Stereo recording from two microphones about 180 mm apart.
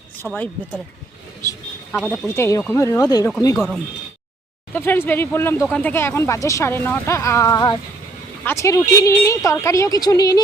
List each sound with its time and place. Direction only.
0.2 s speech: 10° left (ahead or behind)
1.4 s a sound: 15° left (ahead or behind)
2.0 s speech: 10° left (ahead or behind)
4.7 s speech: 10° left (ahead or behind)